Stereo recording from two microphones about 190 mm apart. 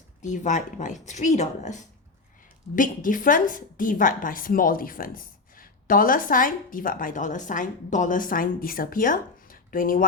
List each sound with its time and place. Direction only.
0.2 s a woman's voice: 40° left (ahead or behind)